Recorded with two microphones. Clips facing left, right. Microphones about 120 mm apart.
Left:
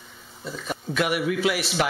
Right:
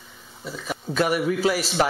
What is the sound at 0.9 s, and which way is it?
Speech, 35° right (ahead or behind).